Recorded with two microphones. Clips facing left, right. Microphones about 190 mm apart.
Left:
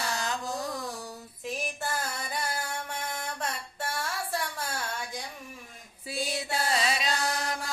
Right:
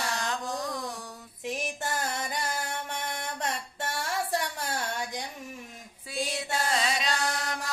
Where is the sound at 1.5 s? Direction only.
20° right (ahead or behind).